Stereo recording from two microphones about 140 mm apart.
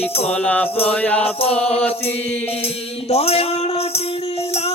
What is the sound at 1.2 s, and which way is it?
Music, 45° left (ahead or behind).